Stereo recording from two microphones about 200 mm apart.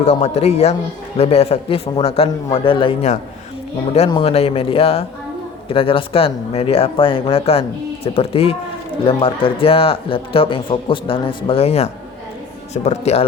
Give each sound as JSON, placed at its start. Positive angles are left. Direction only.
{"t": 0.0, "sound": "a man's voice", "side_deg": 35}